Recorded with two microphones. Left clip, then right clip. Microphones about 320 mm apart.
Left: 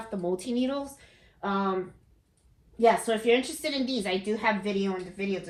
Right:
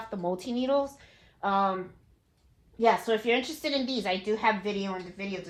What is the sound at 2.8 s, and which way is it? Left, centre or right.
A woman's voice, centre.